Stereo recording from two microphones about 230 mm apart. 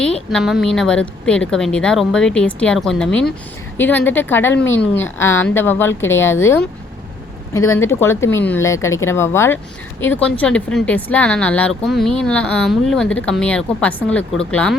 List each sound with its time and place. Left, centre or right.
0.0 s speech: centre
4.5 s speech: left
4.8 s speech: centre